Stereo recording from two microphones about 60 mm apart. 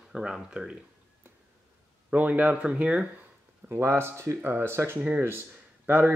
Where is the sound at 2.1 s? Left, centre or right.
Right.